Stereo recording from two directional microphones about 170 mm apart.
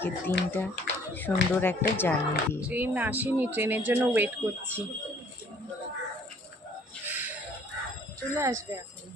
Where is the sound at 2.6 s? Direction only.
10° right (ahead or behind).